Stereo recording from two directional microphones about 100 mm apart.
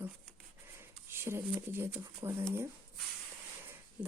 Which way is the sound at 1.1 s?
25° right (ahead or behind).